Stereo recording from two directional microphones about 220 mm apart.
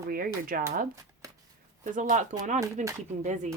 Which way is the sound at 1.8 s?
35° right (ahead or behind).